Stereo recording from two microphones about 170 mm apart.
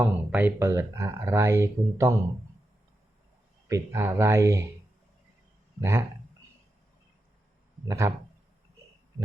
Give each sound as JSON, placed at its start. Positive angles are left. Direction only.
{"t": 0.0, "sound": "speech", "side_deg": -10}
{"t": 3.7, "sound": "speech", "side_deg": -15}
{"t": 5.8, "sound": "speech", "side_deg": -15}
{"t": 7.9, "sound": "speech", "side_deg": -15}